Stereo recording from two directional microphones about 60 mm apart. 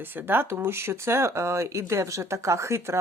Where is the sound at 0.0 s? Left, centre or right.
Right.